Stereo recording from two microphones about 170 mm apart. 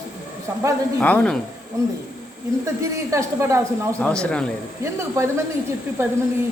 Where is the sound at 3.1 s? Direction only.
15° right (ahead or behind).